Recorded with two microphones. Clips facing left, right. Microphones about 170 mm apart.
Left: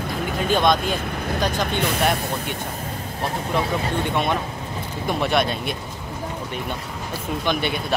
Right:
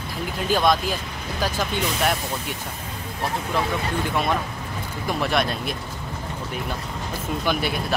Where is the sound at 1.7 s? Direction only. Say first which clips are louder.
Left 2 dB; 55° left (ahead or behind).